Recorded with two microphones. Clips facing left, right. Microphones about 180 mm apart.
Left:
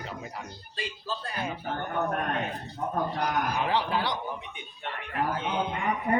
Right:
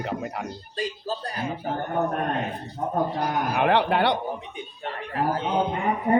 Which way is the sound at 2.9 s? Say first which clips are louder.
Right 4 dB; 25° right (ahead or behind).